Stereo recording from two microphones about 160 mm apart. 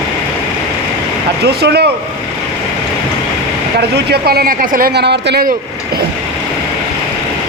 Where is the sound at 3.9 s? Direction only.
85° right.